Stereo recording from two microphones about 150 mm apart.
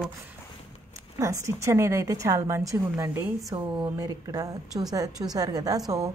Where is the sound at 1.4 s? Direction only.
20° right (ahead or behind).